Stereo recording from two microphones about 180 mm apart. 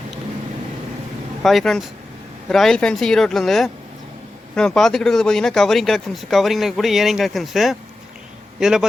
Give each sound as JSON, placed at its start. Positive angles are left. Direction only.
{"t": 1.4, "sound": "speech", "side_deg": 0}